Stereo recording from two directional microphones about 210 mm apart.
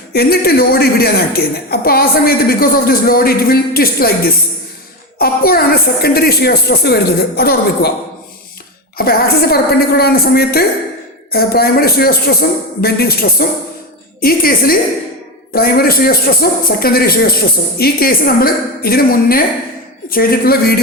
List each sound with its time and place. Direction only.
0.1 s a woman's voice: 50° left (ahead or behind)
9.0 s a woman's voice: 45° left (ahead or behind)